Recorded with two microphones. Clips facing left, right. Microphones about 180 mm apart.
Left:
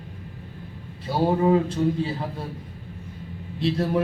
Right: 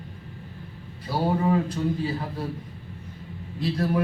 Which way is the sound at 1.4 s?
25° left (ahead or behind).